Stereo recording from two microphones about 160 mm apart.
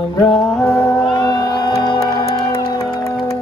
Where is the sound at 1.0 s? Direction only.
25° left (ahead or behind).